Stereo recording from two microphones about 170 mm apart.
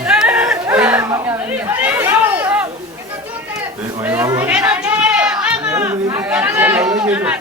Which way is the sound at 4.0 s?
15° right (ahead or behind).